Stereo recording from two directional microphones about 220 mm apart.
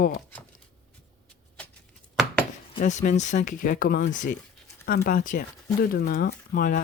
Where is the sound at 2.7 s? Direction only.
35° left (ahead or behind).